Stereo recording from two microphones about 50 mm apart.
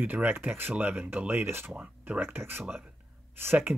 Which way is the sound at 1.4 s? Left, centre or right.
Right.